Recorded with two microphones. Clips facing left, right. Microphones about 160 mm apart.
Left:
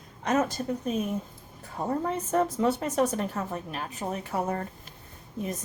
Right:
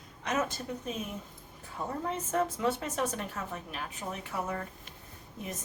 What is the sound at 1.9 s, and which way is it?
A woman's voice, 40° left (ahead or behind).